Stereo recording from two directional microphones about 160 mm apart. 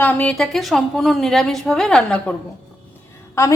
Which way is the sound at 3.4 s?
15° left (ahead or behind).